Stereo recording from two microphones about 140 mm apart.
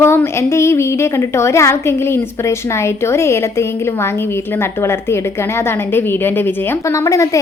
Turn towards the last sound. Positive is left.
turn(degrees=20)  # may be behind; listen again after turning